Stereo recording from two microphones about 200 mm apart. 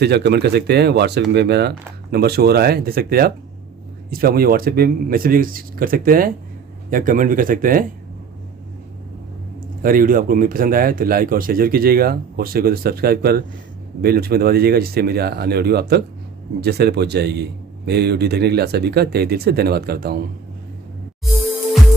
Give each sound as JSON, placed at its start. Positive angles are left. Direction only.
{"t": 0.0, "sound": "a man's voice", "side_deg": -55}
{"t": 9.8, "sound": "a man's voice", "side_deg": -45}